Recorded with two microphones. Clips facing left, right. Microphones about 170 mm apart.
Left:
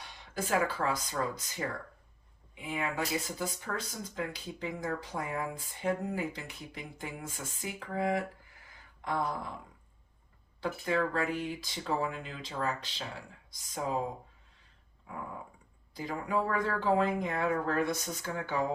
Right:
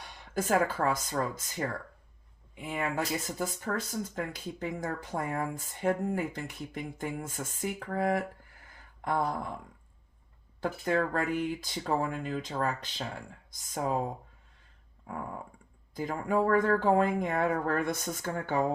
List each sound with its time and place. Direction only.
0.2 s speech: 50° right (ahead or behind)
2.6 s speech: 45° right (ahead or behind)
9.0 s a sound: 50° right (ahead or behind)
10.6 s speech: 50° right (ahead or behind)
16.0 s speech: 50° right (ahead or behind)